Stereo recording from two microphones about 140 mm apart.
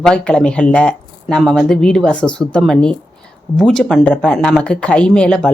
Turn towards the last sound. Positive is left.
turn(degrees=5)  # may be behind; listen again after turning